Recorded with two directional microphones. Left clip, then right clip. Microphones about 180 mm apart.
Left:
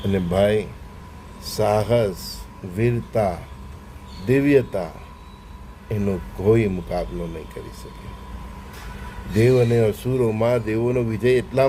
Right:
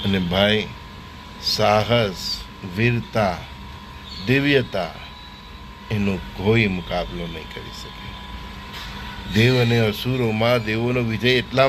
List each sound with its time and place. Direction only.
0.1 s a man's voice: 15° left (ahead or behind)
6.0 s a man's voice: 10° left (ahead or behind)
9.3 s a man's voice: 15° left (ahead or behind)